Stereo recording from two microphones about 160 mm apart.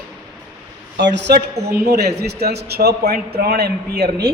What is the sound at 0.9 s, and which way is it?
A man's voice, 90° right.